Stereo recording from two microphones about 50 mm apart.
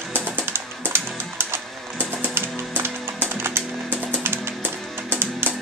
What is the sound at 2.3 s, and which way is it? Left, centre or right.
Music, right.